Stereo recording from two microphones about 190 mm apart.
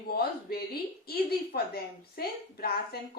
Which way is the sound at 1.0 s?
55° left (ahead or behind).